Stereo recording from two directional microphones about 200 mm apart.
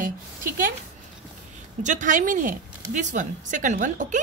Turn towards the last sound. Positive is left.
turn(degrees=-40)  # may be behind; listen again after turning